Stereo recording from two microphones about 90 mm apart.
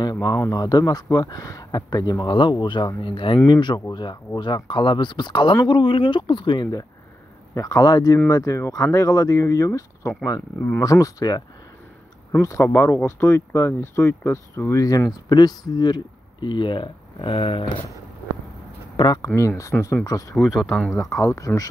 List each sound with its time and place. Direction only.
0.0 s a sound: 50° left (ahead or behind)
0.5 s speech: 45° left (ahead or behind); by 3.3 s 70° left (ahead or behind)
3.4 s speech: 55° left (ahead or behind)
12.3 s speech: 35° left (ahead or behind); by 17.8 s 75° left (ahead or behind)
18.9 s speech: 50° left (ahead or behind)
19.3 s speech: 35° left (ahead or behind)
20.3 s speech: 5° right (ahead or behind)
21.2 s speech: 35° left (ahead or behind)